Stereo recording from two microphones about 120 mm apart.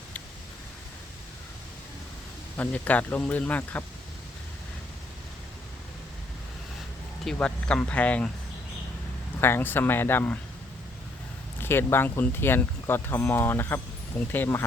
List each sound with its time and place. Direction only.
2.6 s speech: 10° left (ahead or behind)
7.3 s speech: 10° left (ahead or behind)
9.4 s speech: 20° left (ahead or behind)
11.6 s speech: 20° left (ahead or behind)